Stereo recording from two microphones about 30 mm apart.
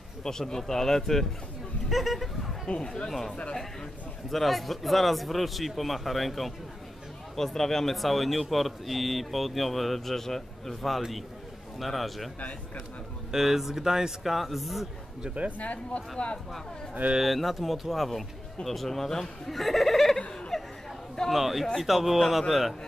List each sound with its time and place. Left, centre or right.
0.2 s speech: centre
1.9 s speech: centre
2.8 s speech: left
4.3 s speech: centre
11.0 s speech: centre
13.3 s speech: centre
14.2 s speech: centre
15.6 s speech: left
17.2 s speech: centre
18.9 s speech: centre
20.5 s chatter: centre
21.3 s speech: centre